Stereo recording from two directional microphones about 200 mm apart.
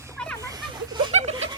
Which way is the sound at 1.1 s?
35° right (ahead or behind).